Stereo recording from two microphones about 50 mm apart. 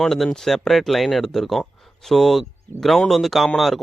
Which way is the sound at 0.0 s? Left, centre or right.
Centre.